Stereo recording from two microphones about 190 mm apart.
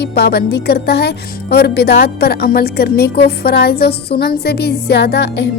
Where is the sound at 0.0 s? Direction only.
60° left (ahead or behind).